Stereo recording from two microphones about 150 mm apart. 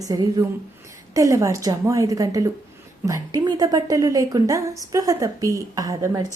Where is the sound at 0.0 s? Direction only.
25° right (ahead or behind).